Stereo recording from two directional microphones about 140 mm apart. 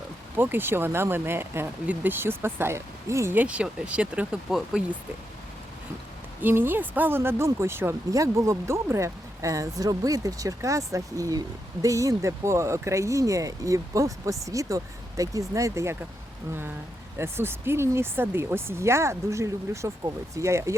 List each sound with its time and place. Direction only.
0.3 s speech: 15° right (ahead or behind)
6.4 s speech: 15° right (ahead or behind)
17.2 s speech: 15° right (ahead or behind)